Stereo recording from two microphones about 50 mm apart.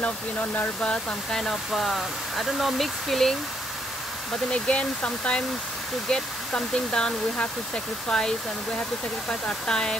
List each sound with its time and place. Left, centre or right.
0.0 s speech: left
1.3 s speech: centre
4.5 s speech: left